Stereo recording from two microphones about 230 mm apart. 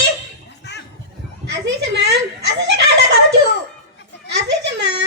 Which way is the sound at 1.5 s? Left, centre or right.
Right.